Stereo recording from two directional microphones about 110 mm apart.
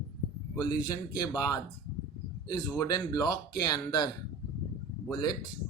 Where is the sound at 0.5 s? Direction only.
35° left (ahead or behind).